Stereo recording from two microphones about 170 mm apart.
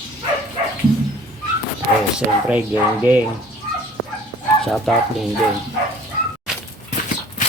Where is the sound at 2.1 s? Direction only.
10° right (ahead or behind).